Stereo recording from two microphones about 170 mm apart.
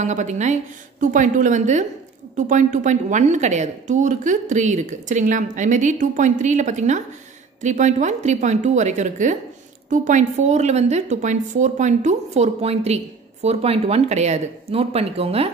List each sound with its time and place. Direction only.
0.0 s a woman's voice: 45° right (ahead or behind)